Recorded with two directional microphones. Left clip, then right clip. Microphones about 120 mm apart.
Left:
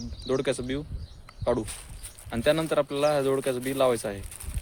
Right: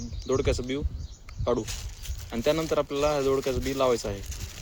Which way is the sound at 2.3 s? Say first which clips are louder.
Left 1 dB; 35° left (ahead or behind).